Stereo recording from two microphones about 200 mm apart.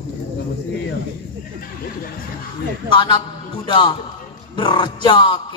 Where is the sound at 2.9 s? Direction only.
25° left (ahead or behind).